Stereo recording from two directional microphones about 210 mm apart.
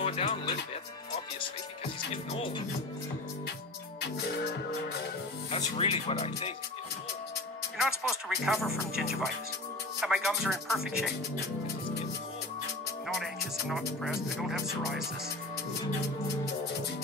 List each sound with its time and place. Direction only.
0.0 s speech: 30° left (ahead or behind)
4.0 s music: 50° left (ahead or behind)
5.5 s speech: 25° left (ahead or behind)
7.7 s speech: centre (ahead or behind)
13.7 s speech: centre (ahead or behind)